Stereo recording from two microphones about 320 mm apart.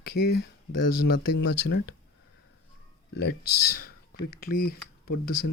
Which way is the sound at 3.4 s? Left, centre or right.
Left.